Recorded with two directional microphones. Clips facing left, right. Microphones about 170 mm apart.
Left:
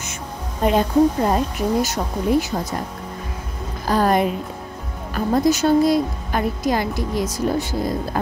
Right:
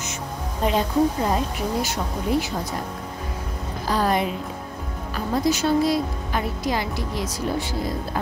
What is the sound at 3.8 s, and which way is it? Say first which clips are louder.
Speech: left 4 dB; 50° left (ahead or behind).